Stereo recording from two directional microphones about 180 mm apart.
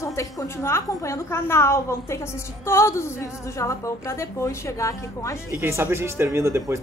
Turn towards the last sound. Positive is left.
turn(degrees=-15)  # may be behind; listen again after turning